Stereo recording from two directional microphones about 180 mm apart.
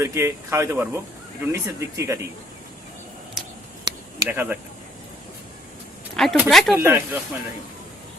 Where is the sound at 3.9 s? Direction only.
25° right (ahead or behind).